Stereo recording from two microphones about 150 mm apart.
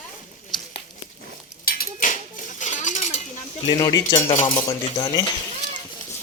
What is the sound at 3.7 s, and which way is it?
Speech, 25° left (ahead or behind).